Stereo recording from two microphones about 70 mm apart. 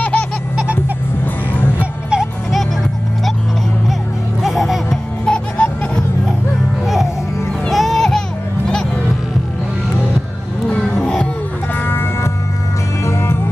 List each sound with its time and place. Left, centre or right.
0.0 s a sound: centre
1.8 s music: centre
4.4 s music: centre
5.2 s music: centre
7.7 s music: centre
10.7 s music: centre
11.7 s music: left